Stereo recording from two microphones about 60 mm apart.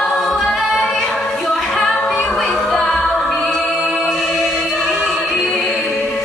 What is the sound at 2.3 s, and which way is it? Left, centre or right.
Music, centre.